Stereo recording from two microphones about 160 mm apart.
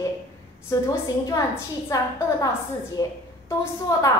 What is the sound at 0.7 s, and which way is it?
A woman's voice, 20° left (ahead or behind).